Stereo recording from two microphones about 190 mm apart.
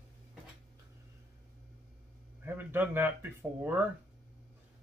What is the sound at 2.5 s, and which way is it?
Speech, 10° right (ahead or behind).